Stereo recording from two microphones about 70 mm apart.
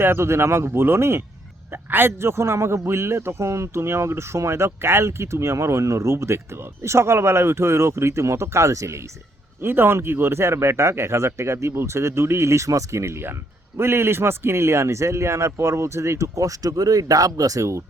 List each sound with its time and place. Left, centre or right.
0.0 s a man's voice: right
9.6 s a man's voice: right